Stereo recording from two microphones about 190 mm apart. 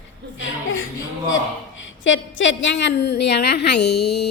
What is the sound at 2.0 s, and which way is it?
A woman's voice, 80° left.